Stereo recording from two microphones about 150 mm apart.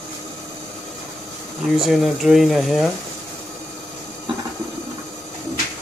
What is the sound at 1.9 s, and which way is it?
Speech, centre (ahead or behind).